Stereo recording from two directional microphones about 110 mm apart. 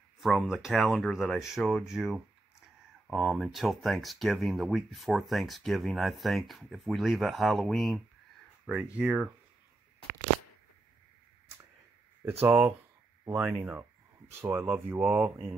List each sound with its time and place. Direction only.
0.2 s speech: centre (ahead or behind)
8.9 s speech: 10° right (ahead or behind)
12.3 s speech: 20° right (ahead or behind)